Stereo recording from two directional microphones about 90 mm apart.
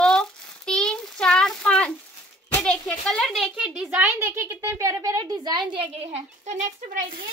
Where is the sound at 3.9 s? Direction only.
20° right (ahead or behind); by 5.6 s 45° right (ahead or behind).